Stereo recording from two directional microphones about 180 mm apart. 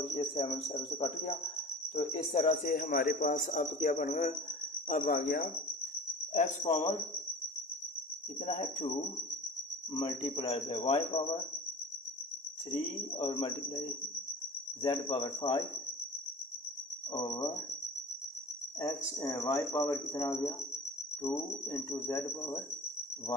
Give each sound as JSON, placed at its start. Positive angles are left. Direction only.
{"t": 0.0, "sound": "speech", "side_deg": 35}
{"t": 8.4, "sound": "cricket", "side_deg": 35}
{"t": 9.9, "sound": "speech", "side_deg": 25}
{"t": 12.7, "sound": "speech", "side_deg": 30}
{"t": 15.0, "sound": "speech", "side_deg": 30}
{"t": 17.1, "sound": "speech", "side_deg": 25}
{"t": 18.8, "sound": "speech", "side_deg": 20}